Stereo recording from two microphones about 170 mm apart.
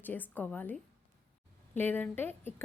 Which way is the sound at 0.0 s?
10° left (ahead or behind).